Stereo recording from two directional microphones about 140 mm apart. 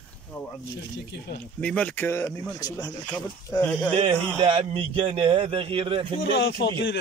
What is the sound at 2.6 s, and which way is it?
Speech, 25° left (ahead or behind).